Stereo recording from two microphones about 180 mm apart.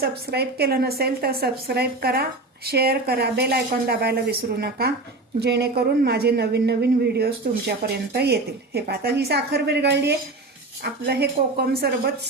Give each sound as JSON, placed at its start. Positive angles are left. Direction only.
{"t": 0.0, "sound": "speech", "side_deg": -60}